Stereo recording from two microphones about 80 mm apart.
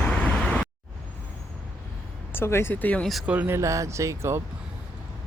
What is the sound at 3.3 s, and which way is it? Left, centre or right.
Speech, right.